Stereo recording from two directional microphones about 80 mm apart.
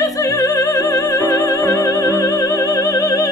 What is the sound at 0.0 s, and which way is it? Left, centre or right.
Music, left.